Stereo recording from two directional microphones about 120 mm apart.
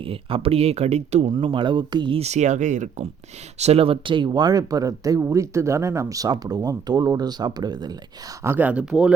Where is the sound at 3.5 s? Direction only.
60° right (ahead or behind); by 8.3 s 35° right (ahead or behind).